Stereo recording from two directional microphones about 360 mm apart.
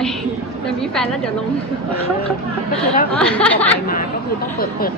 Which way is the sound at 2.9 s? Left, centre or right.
Centre.